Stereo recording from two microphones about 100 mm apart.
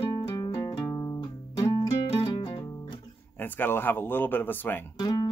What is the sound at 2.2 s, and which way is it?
Music, 60° left (ahead or behind).